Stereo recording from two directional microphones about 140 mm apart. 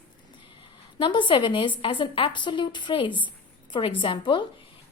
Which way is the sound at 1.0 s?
35° left (ahead or behind).